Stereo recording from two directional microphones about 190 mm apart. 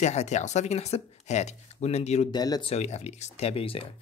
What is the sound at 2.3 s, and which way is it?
Speech, 20° left (ahead or behind).